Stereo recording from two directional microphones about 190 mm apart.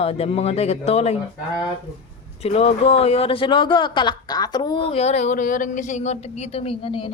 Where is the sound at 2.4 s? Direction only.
35° left (ahead or behind).